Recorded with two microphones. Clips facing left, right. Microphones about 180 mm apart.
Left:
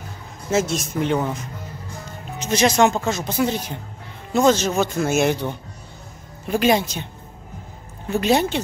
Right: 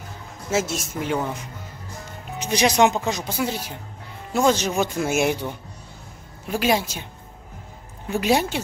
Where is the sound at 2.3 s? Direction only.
15° right (ahead or behind).